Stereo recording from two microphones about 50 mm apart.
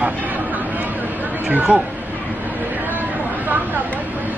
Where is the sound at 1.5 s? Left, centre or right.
Right.